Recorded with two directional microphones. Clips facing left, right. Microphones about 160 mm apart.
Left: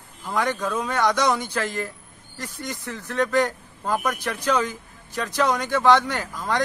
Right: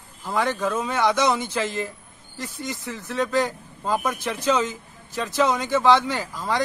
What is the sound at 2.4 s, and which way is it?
Speech, 15° right (ahead or behind).